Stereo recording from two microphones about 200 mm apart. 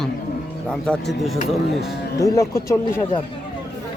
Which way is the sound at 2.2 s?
15° left (ahead or behind).